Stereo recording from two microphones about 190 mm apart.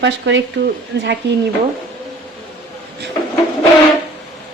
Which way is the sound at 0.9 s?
65° right (ahead or behind).